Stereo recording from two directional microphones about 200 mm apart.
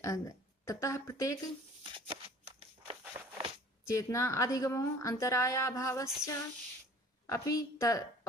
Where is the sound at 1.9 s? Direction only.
30° right (ahead or behind).